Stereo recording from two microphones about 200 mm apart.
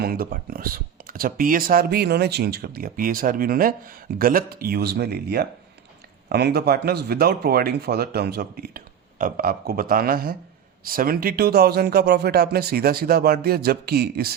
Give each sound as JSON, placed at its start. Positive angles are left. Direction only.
{"t": 0.0, "sound": "speech", "side_deg": -50}